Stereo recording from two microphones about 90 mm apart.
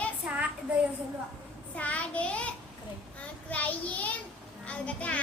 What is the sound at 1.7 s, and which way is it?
A child's voice, 15° left (ahead or behind).